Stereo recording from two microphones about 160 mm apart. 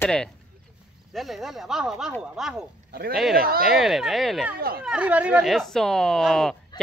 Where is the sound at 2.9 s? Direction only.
70° right (ahead or behind).